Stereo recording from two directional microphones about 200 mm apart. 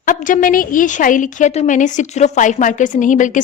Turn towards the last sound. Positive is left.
turn(degrees=40)  # may be behind; listen again after turning